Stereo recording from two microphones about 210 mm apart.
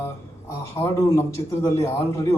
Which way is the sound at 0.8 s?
25° left (ahead or behind).